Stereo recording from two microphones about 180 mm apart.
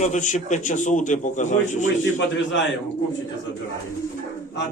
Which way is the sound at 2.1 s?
90° left.